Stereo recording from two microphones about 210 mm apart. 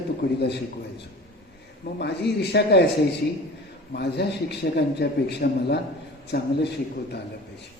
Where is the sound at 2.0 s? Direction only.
50° left (ahead or behind).